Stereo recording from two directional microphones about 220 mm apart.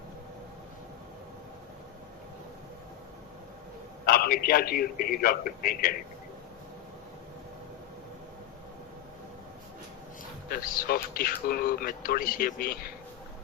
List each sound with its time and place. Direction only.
4.0 s speech: 40° left (ahead or behind)
10.5 s speech: 40° left (ahead or behind)